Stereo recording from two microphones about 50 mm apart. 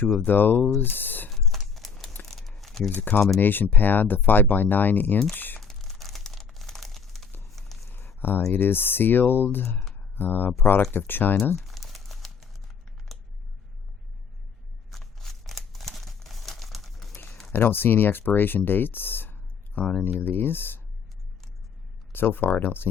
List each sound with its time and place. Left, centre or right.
0.3 s speech: left
1.3 s a sound: centre
2.2 s crumpling: centre
2.9 s speech: left
5.5 s crumpling: centre
7.5 s a sound: centre
7.9 s a sound: left
8.5 s speech: left
11.5 s a sound: centre
14.8 s crumpling: centre
17.5 s speech: left
19.8 s speech: left
20.1 s speech: left
22.1 s speech: left